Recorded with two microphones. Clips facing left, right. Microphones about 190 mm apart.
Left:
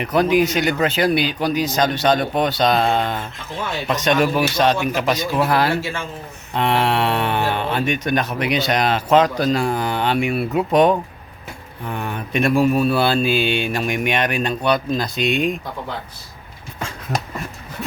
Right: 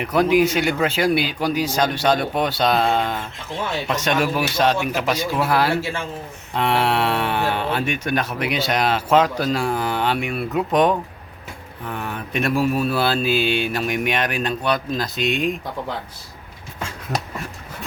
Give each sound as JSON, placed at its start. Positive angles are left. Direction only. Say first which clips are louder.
{"t": 0.0, "sound": "speech", "louder": "even", "side_deg": -5}